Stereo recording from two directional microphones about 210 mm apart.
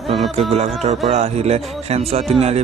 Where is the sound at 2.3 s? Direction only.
30° right (ahead or behind).